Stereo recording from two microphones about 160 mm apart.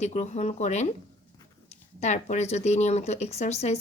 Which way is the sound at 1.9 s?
45° left (ahead or behind).